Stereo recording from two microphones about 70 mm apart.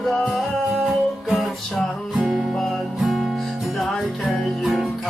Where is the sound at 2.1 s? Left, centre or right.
Centre.